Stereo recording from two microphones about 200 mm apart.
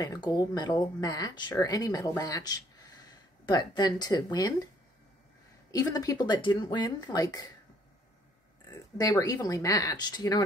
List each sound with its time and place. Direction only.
0.0 s speech: 20° left (ahead or behind)
5.7 s speech: 20° left (ahead or behind)
8.6 s speech: 20° left (ahead or behind)